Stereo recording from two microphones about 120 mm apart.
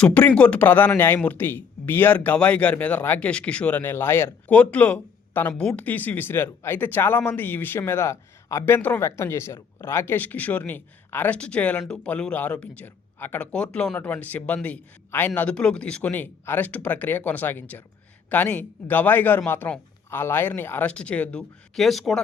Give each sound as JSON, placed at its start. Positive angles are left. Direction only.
{"t": 0.0, "sound": "speech", "side_deg": 10}